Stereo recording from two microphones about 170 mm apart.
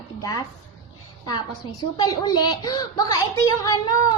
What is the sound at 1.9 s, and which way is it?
A woman's voice, 25° left (ahead or behind).